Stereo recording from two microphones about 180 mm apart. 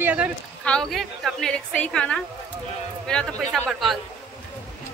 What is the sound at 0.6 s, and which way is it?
A woman's voice, 5° left (ahead or behind).